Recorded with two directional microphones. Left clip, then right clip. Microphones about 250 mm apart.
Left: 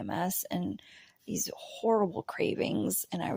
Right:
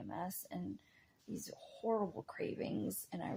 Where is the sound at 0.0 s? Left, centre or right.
Left.